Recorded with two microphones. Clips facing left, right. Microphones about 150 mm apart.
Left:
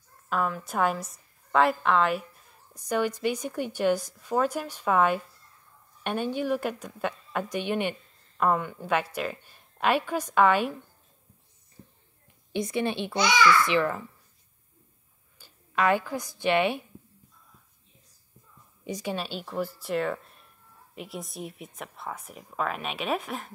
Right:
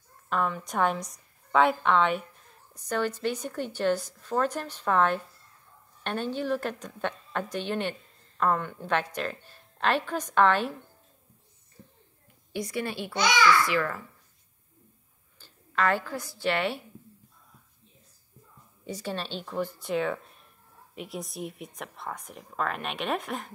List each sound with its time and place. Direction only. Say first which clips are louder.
0.3 s a woman's voice: even; 5° left (ahead or behind)
12.5 s a woman's voice: left 4 dB; 20° left (ahead or behind)
15.3 s a woman's voice: left 1 dB; 15° left (ahead or behind)
18.9 s speech: left 2 dB; 15° left (ahead or behind)